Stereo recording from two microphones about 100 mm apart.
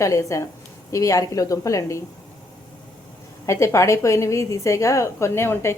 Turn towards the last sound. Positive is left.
turn(degrees=25)  # may be behind; listen again after turning